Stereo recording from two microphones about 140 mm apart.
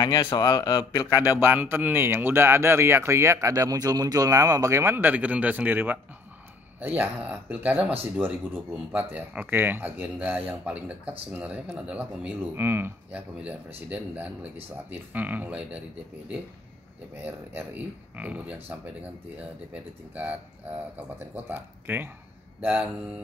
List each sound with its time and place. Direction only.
0.0 s a man's voice: 30° left (ahead or behind)
1.4 s speech: 15° right (ahead or behind)
17.2 s speech: 15° right (ahead or behind)
21.4 s speech: 15° right (ahead or behind)